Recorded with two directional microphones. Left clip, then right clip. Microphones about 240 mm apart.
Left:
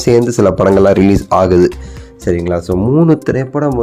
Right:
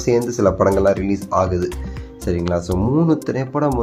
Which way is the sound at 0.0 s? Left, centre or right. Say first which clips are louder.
Left 7 dB; left.